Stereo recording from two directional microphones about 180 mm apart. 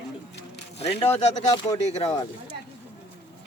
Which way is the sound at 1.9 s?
35° left (ahead or behind).